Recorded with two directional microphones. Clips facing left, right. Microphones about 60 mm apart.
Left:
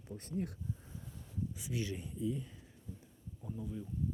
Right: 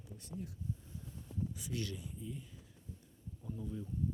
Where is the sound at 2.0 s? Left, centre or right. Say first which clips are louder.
Left 8 dB; left.